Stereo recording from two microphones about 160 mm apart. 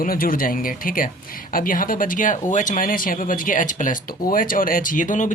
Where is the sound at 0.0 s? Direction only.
60° left (ahead or behind).